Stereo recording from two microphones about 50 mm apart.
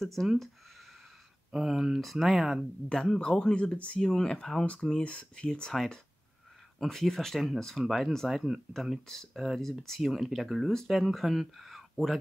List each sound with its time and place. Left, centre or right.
0.0 s speech: centre
1.5 s speech: centre
2.9 s speech: centre
5.7 s speech: centre